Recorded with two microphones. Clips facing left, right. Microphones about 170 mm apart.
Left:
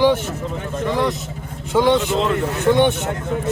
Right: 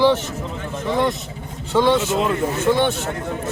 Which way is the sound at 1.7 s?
15° left (ahead or behind).